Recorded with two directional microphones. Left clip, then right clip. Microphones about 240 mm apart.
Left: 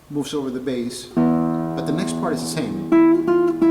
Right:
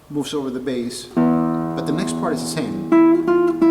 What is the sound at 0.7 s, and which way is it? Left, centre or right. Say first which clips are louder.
Speech: right 1 dB; centre.